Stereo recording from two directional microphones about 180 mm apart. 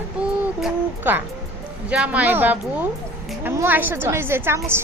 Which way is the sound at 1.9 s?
5° right (ahead or behind).